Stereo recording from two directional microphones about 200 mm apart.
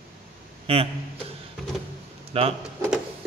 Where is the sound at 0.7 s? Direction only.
30° right (ahead or behind).